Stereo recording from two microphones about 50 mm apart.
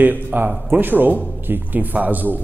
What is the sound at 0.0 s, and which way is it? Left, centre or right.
A man's voice, right.